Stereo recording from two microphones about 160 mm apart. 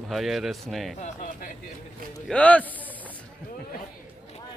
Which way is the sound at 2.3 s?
10° left (ahead or behind).